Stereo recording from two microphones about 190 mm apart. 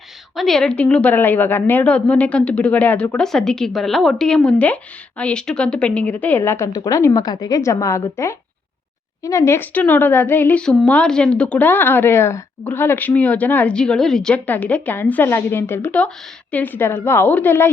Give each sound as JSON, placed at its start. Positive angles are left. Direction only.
{"t": 0.3, "sound": "speech", "side_deg": 0}